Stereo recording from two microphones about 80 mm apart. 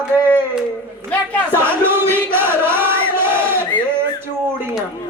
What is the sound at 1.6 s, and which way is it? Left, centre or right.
Crowd, right.